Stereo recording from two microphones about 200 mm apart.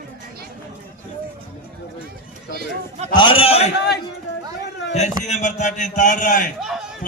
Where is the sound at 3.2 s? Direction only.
25° left (ahead or behind).